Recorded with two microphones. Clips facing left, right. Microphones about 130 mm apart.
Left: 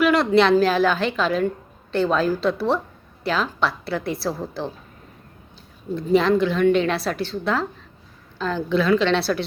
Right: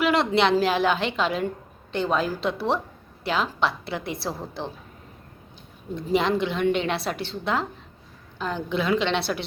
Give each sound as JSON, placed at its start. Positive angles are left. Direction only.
{"t": 0.0, "sound": "a sound", "side_deg": -25}
{"t": 0.3, "sound": "a woman's voice", "side_deg": -20}
{"t": 6.1, "sound": "a woman's voice", "side_deg": -20}